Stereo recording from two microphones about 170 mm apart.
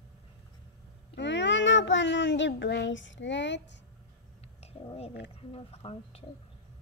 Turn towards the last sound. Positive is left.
turn(degrees=35)  # may be behind; listen again after turning